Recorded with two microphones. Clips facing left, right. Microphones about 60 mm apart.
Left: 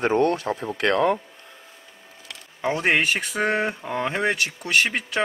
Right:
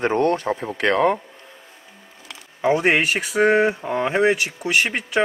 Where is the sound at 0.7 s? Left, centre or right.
Right.